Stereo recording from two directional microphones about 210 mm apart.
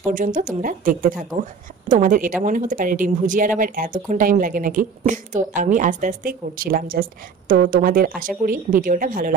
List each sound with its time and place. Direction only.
0.1 s a woman's voice: 40° right (ahead or behind)